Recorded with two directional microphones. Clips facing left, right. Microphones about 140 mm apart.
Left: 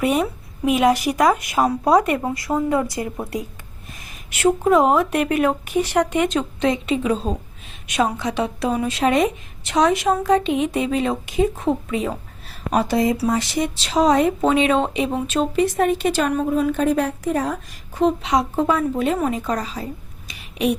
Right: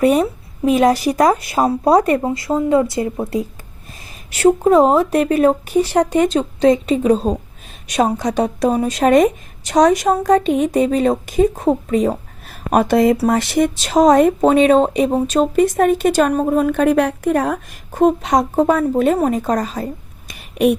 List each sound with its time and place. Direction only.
0.0 s speech: 40° right (ahead or behind)
4.3 s speech: 35° right (ahead or behind); by 20.7 s 50° right (ahead or behind)